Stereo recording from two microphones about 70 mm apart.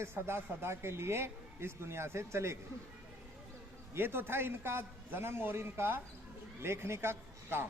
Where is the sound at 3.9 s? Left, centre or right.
Right.